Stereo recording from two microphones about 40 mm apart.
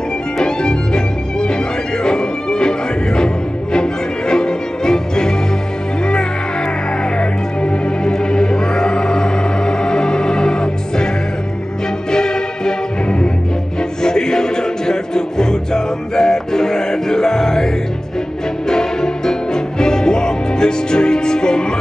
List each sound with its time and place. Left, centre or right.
0.4 s music: centre
3.7 s music: centre
7.2 s music: centre
12.1 s music: centre
18.7 s music: centre